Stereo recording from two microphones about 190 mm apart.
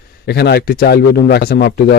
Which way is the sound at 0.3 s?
60° left (ahead or behind).